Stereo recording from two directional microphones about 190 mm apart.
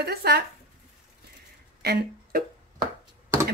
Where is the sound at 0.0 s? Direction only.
55° right (ahead or behind).